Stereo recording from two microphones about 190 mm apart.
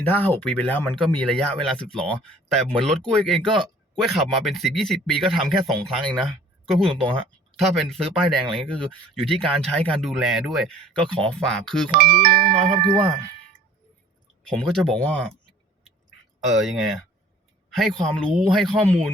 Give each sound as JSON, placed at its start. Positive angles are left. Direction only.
{"t": 0.0, "sound": "speech", "side_deg": 10}
{"t": 11.9, "sound": "speech", "side_deg": -50}
{"t": 14.4, "sound": "speech", "side_deg": 5}
{"t": 16.5, "sound": "speech", "side_deg": 0}